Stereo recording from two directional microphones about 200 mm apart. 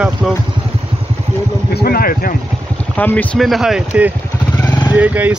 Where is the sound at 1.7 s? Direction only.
50° left (ahead or behind).